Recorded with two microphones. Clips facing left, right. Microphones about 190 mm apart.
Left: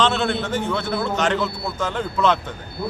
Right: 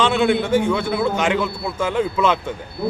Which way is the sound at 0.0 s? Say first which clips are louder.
Right 4 dB; 10° right (ahead or behind).